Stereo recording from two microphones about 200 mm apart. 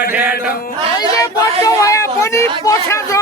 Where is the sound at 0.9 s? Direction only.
15° left (ahead or behind).